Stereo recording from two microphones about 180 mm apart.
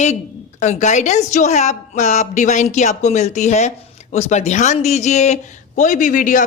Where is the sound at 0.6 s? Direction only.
40° left (ahead or behind).